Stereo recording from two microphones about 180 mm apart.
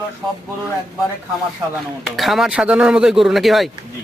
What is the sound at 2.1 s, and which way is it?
Speech, centre (ahead or behind).